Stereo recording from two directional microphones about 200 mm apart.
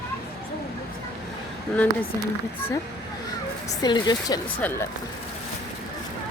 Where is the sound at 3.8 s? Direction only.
20° left (ahead or behind).